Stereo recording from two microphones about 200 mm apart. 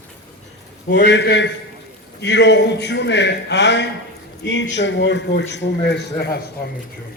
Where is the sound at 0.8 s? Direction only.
60° left (ahead or behind).